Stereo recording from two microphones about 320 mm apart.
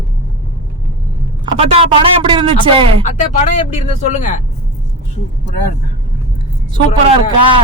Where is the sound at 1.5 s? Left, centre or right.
Centre.